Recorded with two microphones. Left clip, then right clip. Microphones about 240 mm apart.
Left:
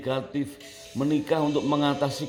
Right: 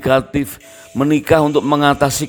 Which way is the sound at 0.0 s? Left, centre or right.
Right.